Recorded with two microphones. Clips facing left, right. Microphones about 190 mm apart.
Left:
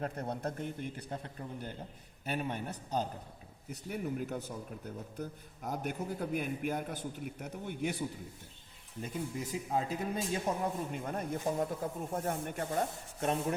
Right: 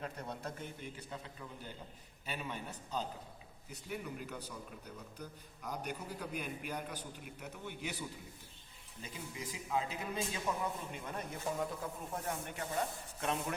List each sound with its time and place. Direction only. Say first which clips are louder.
0.0 s speech: left 7 dB; 55° left (ahead or behind)